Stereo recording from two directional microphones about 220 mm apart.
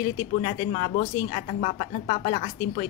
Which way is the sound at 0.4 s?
25° left (ahead or behind).